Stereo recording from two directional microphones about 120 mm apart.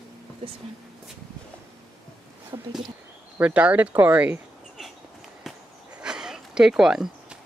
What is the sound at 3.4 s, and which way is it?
Speech, 10° right (ahead or behind).